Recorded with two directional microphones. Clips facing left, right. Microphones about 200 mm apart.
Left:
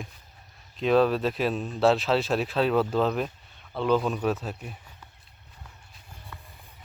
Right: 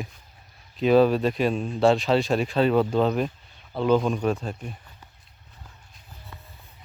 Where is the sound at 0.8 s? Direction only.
Centre (ahead or behind).